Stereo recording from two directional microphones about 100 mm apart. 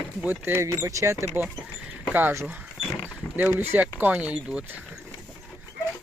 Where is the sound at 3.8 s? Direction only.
15° right (ahead or behind).